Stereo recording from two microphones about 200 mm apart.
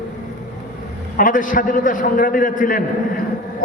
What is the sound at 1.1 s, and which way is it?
A man's voice, 40° left (ahead or behind).